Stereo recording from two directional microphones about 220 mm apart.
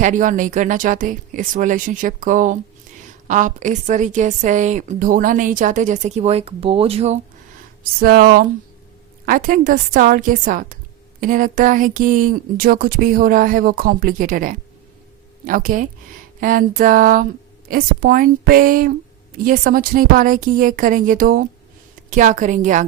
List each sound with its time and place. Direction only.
0.0 s a woman's voice: 35° right (ahead or behind)
7.9 s a woman's voice: 45° right (ahead or behind)